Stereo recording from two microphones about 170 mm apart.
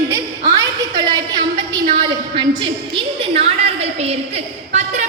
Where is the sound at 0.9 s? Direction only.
25° right (ahead or behind).